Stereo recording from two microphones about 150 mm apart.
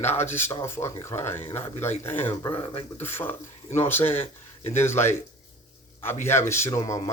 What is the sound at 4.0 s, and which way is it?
Speech, 40° left (ahead or behind).